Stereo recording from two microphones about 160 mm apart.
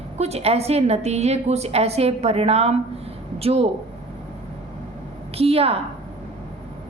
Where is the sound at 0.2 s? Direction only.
40° right (ahead or behind).